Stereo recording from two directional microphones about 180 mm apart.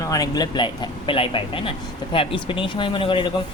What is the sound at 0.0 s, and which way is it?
A man's voice, 20° left (ahead or behind).